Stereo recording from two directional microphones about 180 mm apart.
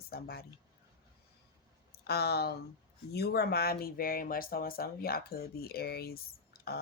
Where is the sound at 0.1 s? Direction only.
60° left (ahead or behind).